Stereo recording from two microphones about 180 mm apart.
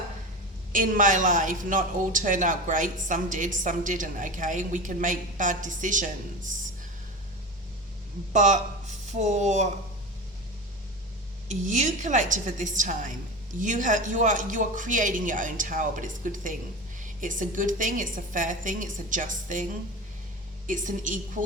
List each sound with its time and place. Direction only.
0.7 s speech: 45° right (ahead or behind)
8.3 s speech: 40° right (ahead or behind)
11.4 s speech: 45° right (ahead or behind)
20.7 s speech: 45° right (ahead or behind)